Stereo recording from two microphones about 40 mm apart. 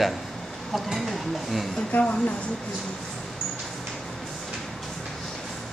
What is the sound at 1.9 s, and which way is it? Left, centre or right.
Speech, left.